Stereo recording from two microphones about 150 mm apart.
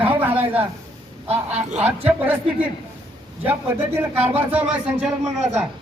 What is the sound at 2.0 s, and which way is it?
Speech, 10° right (ahead or behind).